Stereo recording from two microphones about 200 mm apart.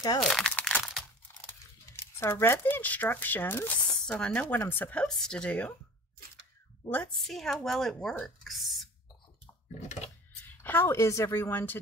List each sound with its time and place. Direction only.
0.2 s crumpling: centre (ahead or behind)
2.1 s speech: 10° left (ahead or behind)
6.9 s speech: 5° left (ahead or behind)
9.8 s speech: 35° left (ahead or behind)
10.4 s speech: 10° left (ahead or behind)